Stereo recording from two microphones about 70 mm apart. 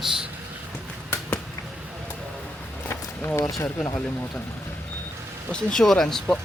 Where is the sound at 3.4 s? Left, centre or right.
Left.